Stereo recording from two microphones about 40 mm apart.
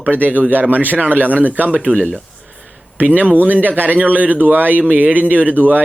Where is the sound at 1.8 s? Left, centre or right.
Right.